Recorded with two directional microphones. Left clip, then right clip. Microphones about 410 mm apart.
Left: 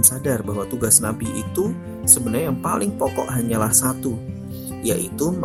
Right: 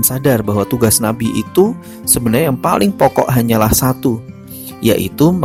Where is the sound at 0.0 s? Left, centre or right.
Centre.